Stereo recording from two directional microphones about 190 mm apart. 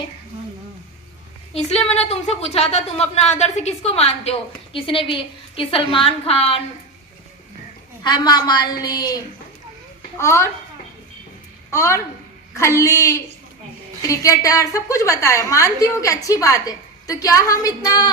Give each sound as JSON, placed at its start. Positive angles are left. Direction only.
{"t": 1.5, "sound": "a woman's voice", "side_deg": 35}
{"t": 8.0, "sound": "a woman's voice", "side_deg": 20}
{"t": 10.2, "sound": "a woman's voice", "side_deg": 15}
{"t": 11.7, "sound": "a woman's voice", "side_deg": 15}